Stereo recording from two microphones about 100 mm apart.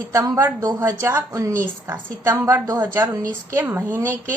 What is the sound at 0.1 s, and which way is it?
A woman's voice, 30° right (ahead or behind).